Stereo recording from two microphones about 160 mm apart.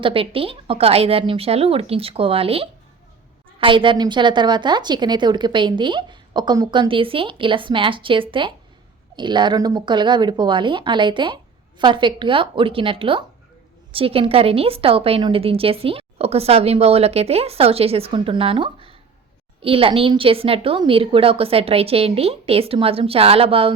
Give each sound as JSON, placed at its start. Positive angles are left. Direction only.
{"t": 0.0, "sound": "a woman's voice", "side_deg": -35}